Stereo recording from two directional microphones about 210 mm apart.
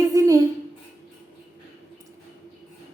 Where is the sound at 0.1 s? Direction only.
15° right (ahead or behind).